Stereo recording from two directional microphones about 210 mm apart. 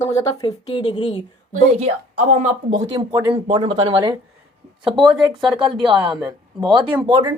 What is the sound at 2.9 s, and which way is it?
Speech, 15° right (ahead or behind).